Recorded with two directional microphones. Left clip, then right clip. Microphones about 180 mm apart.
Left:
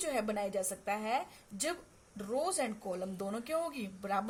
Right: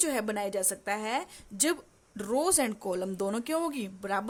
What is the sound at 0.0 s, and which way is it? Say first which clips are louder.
A woman's voice: right 4 dB; 45° right (ahead or behind).